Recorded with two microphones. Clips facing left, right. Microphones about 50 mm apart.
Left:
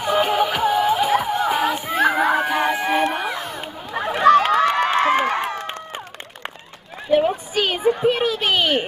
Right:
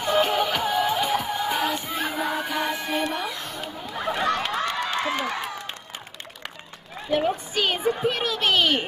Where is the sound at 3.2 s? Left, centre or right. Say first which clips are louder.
Left 5 dB; centre.